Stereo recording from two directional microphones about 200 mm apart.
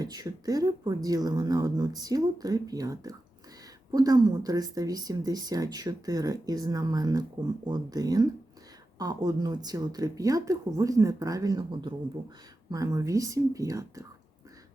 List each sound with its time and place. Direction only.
0.0 s speech: 20° right (ahead or behind)